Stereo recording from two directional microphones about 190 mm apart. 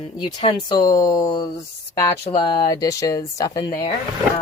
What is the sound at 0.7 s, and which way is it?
Speech, 20° left (ahead or behind).